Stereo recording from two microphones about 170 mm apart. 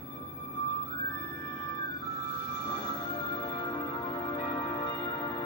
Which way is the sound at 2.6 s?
30° left (ahead or behind).